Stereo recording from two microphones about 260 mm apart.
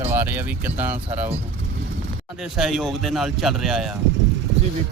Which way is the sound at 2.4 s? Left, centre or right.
Centre.